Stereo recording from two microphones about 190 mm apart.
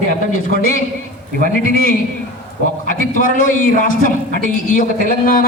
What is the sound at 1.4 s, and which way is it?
A man's voice, 45° left (ahead or behind).